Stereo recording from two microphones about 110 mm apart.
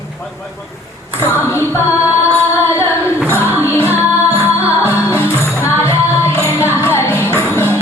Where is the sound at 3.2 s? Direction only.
20° right (ahead or behind).